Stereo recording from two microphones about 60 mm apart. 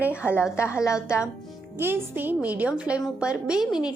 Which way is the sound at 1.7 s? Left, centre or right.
Right.